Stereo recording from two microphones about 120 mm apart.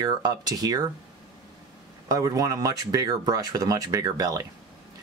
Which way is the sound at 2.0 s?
30° right (ahead or behind).